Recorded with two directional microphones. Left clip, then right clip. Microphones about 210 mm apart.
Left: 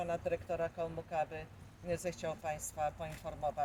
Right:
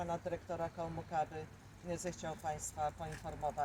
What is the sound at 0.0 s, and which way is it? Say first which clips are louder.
Speech: left 4 dB; 15° left (ahead or behind).